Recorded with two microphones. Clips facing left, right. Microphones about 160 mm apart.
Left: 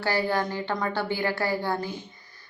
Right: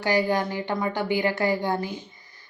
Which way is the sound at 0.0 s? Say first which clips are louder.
Right 3 dB; 15° right (ahead or behind).